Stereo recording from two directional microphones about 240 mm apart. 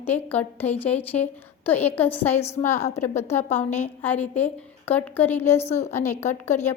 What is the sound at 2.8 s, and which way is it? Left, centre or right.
Speech, left.